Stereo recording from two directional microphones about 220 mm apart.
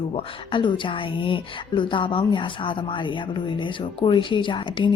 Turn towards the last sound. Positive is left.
turn(degrees=20)  # may be behind; listen again after turning